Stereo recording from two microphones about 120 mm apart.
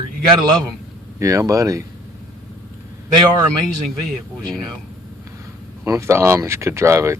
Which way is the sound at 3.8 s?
Centre (ahead or behind).